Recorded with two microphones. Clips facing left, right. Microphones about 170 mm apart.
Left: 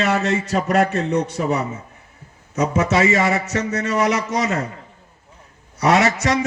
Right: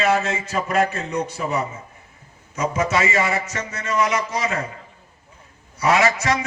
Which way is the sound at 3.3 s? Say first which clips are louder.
Left 5 dB; 70° left (ahead or behind).